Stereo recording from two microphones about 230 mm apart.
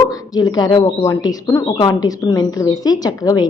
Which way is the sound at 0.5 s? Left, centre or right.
Centre.